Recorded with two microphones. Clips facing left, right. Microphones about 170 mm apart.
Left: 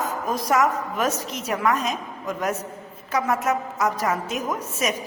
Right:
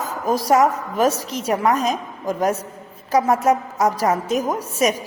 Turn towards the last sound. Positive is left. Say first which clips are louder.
# right 6 dB
turn(degrees=-35)  # may be behind; listen again after turning